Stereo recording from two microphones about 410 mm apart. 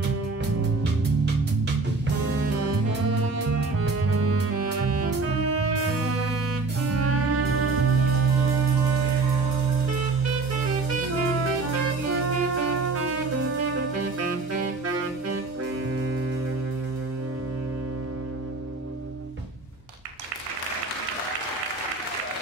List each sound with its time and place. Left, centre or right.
5.4 s music: right
7.0 s music: right
12.3 s music: right